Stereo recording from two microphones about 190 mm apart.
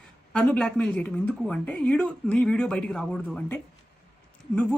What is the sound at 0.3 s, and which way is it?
Speech, 5° left (ahead or behind).